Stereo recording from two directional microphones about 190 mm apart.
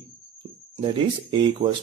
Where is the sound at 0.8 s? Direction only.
25° right (ahead or behind).